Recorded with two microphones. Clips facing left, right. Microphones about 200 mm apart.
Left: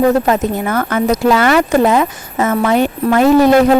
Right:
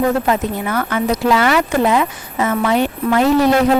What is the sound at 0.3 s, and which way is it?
Speech, 45° left (ahead or behind).